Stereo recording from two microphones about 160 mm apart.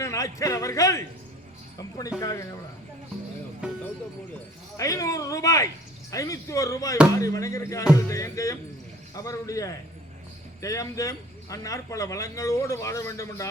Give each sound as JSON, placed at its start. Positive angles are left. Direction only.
{"t": 0.0, "sound": "a man's voice", "side_deg": 20}
{"t": 4.8, "sound": "a man's voice", "side_deg": 20}